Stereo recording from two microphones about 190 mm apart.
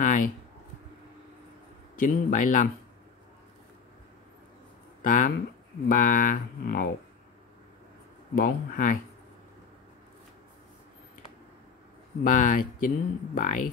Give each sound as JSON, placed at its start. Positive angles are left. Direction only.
{"t": 0.0, "sound": "a sound", "side_deg": 45}
{"t": 2.0, "sound": "speech", "side_deg": 45}
{"t": 5.0, "sound": "speech", "side_deg": 45}
{"t": 8.4, "sound": "speech", "side_deg": 45}
{"t": 12.2, "sound": "speech", "side_deg": 45}